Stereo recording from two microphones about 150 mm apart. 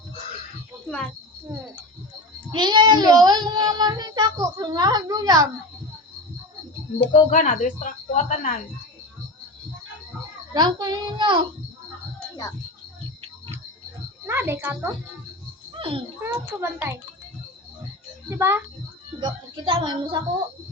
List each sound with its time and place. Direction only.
0.9 s speech: 5° left (ahead or behind)
1.5 s speech: 15° right (ahead or behind)
2.5 s speech: 30° right (ahead or behind)
7.1 s a woman's voice: 55° left (ahead or behind)
10.5 s speech: 30° right (ahead or behind)
14.3 s a child's voice: 15° right (ahead or behind)
15.8 s a child's voice: 35° right (ahead or behind)
16.2 s a child's voice: 15° right (ahead or behind)
18.3 s a child's voice: 15° right (ahead or behind)
19.2 s speech: 35° right (ahead or behind)